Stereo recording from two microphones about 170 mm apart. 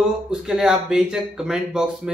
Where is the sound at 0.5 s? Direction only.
5° right (ahead or behind).